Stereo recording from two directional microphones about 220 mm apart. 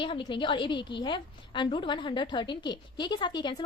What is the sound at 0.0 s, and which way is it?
A woman's voice, 20° left (ahead or behind).